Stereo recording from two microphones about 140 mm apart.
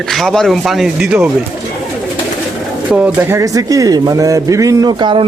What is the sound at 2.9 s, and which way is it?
Speech, 10° right (ahead or behind).